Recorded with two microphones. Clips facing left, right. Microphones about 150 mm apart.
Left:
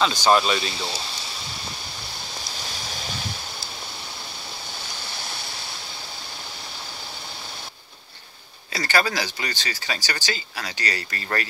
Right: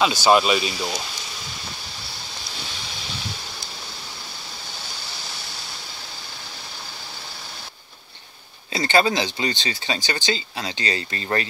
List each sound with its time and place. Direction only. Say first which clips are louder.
0.0 s speech: right 2 dB; 10° right (ahead or behind)
8.7 s speech: right 4 dB; 25° right (ahead or behind)